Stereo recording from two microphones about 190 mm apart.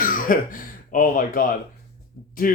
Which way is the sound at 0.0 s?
45° left (ahead or behind).